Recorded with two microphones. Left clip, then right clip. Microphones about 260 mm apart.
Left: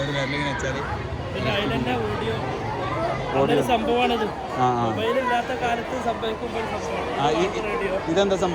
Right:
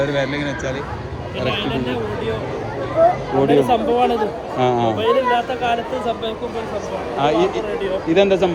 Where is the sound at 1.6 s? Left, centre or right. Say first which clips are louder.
Right 2 dB; centre.